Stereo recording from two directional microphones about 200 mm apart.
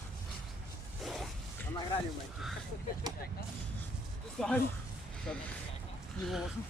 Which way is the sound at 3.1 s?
20° right (ahead or behind).